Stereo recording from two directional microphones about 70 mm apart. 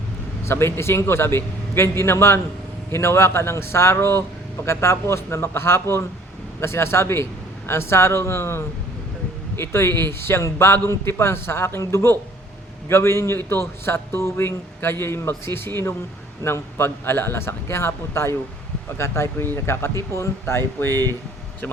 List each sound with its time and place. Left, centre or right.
0.4 s a man's voice: left